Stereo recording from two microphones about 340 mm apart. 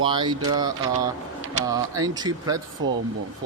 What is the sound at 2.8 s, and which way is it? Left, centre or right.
Speech, right.